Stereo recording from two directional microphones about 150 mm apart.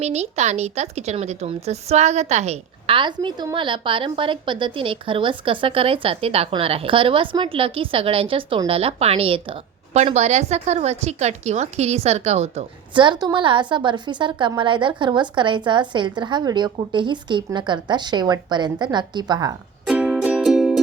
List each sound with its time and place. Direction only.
0.0 s a woman's voice: 45° right (ahead or behind); by 19.5 s 25° right (ahead or behind)
19.9 s music: 5° right (ahead or behind)